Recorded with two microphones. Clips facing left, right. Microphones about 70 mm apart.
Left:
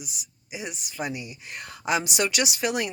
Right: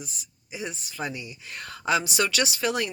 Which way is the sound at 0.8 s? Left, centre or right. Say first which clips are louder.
Left 1 dB; centre.